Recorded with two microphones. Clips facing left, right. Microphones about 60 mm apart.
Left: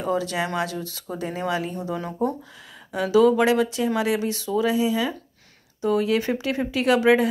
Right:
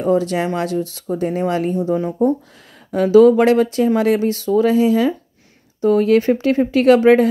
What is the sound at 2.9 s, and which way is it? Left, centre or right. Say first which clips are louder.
Speech: right 8 dB; right.